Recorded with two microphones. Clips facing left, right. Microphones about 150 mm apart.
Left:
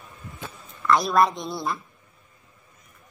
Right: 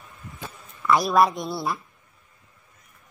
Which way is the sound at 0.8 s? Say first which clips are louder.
Right 1 dB; 5° right (ahead or behind).